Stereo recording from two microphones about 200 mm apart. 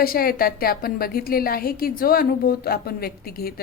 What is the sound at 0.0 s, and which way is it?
A woman's voice, 45° left (ahead or behind).